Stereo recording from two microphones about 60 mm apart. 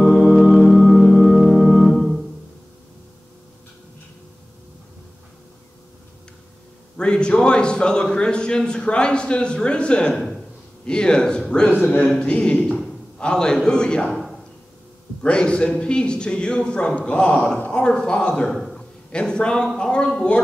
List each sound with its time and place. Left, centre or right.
0.0 s organ: centre
7.0 s a man's voice: centre
11.8 s speech: left
12.2 s speech: centre
15.2 s a man's voice: centre